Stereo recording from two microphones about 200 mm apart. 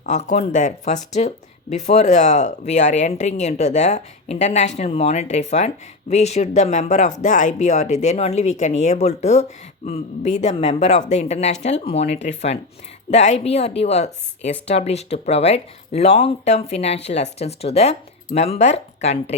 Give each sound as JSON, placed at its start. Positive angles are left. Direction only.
{"t": 0.0, "sound": "speech", "side_deg": 35}